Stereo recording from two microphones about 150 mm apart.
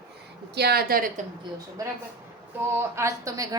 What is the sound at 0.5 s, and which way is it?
Speech, 90° right.